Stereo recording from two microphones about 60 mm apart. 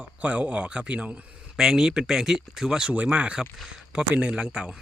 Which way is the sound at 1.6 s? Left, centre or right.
Centre.